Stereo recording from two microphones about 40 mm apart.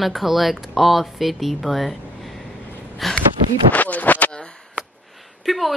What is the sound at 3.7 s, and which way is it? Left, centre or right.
Speech, left.